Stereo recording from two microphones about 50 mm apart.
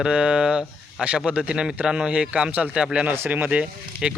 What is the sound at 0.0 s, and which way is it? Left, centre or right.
A man's voice, right.